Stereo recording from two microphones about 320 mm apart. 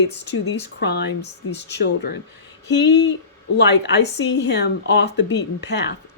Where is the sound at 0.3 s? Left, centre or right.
Left.